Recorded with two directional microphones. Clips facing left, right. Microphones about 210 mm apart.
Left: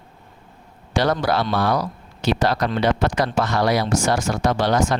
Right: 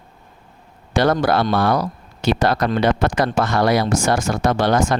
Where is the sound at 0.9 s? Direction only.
50° right (ahead or behind).